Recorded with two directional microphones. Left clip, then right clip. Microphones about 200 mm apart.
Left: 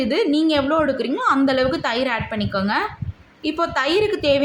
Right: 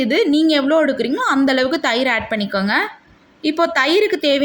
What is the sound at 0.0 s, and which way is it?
A woman's voice, 15° right (ahead or behind).